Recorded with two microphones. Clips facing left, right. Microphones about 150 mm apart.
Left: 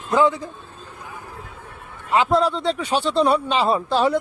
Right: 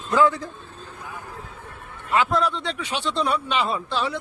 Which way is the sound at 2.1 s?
30° left (ahead or behind).